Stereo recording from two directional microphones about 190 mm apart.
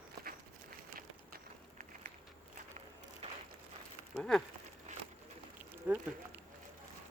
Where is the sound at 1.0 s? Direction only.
45° right (ahead or behind).